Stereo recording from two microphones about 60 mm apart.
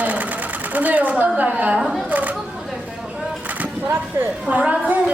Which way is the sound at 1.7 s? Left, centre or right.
Centre.